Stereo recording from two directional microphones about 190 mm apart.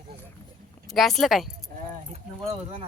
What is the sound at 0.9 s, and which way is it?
Speech, centre (ahead or behind).